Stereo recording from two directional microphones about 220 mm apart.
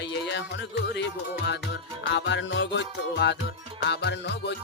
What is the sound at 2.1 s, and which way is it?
Music, 55° left (ahead or behind).